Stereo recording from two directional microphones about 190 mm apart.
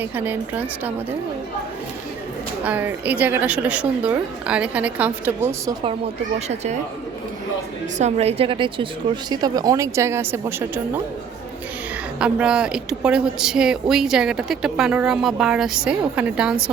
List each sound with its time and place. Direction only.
0.0 s a woman's voice: 10° right (ahead or behind)
2.6 s a woman's voice: 10° right (ahead or behind)
7.9 s a woman's voice: 35° right (ahead or behind); by 10.5 s 15° right (ahead or behind)
12.2 s speech: 5° right (ahead or behind)